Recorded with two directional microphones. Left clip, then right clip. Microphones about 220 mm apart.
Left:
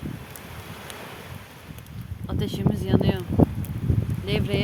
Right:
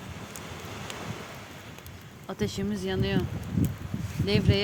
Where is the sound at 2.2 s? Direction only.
Centre (ahead or behind).